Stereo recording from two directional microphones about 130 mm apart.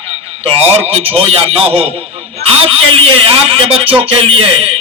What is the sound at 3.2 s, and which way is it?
A man's voice, 45° right (ahead or behind).